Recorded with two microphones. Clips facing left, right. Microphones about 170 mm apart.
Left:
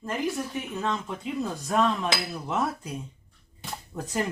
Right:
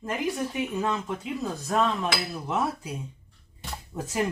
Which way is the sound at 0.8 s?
5° right (ahead or behind).